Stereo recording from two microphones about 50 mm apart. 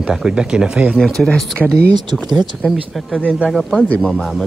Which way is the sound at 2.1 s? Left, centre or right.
Centre.